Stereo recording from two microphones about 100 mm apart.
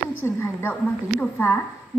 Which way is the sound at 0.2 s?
20° left (ahead or behind).